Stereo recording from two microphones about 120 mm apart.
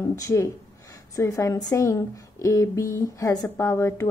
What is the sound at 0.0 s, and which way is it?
A woman's voice, 25° left (ahead or behind).